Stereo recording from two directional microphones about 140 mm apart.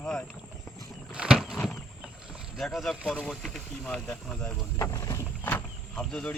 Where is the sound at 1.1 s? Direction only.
5° right (ahead or behind).